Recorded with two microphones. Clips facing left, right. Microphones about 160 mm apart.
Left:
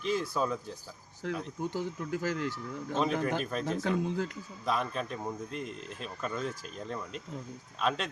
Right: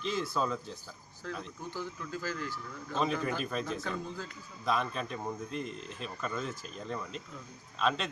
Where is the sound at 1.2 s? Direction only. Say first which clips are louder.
Left 6 dB; 65° left (ahead or behind).